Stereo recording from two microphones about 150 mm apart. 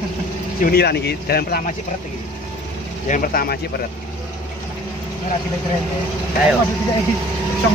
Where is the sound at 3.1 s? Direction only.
70° left (ahead or behind).